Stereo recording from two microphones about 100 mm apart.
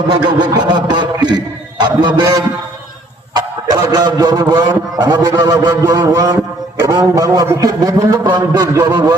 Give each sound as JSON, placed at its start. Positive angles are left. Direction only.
{"t": 0.1, "sound": "a man's voice", "side_deg": -50}
{"t": 5.4, "sound": "a sound", "side_deg": -40}
{"t": 8.3, "sound": "a man's voice", "side_deg": -45}